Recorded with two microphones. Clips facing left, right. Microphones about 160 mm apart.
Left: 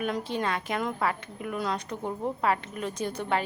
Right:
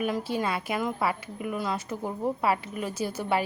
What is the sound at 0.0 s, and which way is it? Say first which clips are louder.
A woman's voice: right 1 dB; 5° right (ahead or behind).